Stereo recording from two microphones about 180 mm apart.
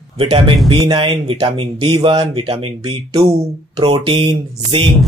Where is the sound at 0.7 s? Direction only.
30° right (ahead or behind).